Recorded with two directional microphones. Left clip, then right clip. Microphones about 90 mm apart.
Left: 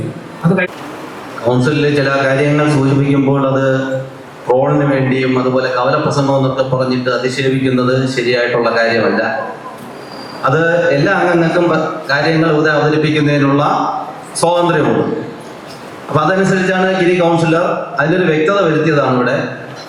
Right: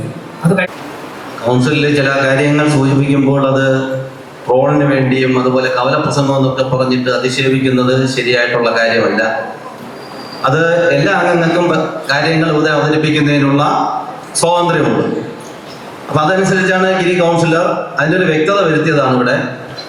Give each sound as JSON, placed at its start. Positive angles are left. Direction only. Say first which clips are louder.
{"t": 1.5, "sound": "a man's voice", "louder": "right 1 dB", "side_deg": -50}
{"t": 10.4, "sound": "a man's voice", "louder": "right 1 dB", "side_deg": -45}
{"t": 16.1, "sound": "a man's voice", "louder": "right 1 dB", "side_deg": -45}